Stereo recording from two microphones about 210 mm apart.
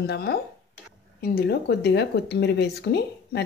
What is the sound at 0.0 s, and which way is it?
Speech, 50° left (ahead or behind).